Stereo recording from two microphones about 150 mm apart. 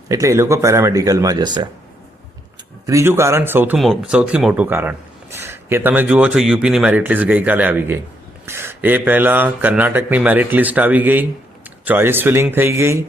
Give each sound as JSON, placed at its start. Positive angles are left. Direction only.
{"t": 0.1, "sound": "speech", "side_deg": -20}
{"t": 2.8, "sound": "speech", "side_deg": -20}
{"t": 3.8, "sound": "speech", "side_deg": -5}